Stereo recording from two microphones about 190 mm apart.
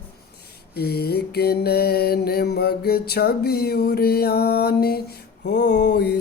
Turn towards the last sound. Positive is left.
turn(degrees=60)  # may be behind; listen again after turning